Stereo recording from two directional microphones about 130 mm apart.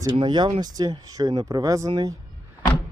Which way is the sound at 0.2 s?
35° right (ahead or behind).